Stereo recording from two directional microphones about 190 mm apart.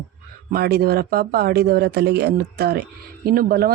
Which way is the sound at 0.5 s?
55° right (ahead or behind).